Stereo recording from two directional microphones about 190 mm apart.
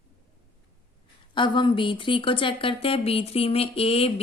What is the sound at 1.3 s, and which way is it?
Speech, 25° left (ahead or behind).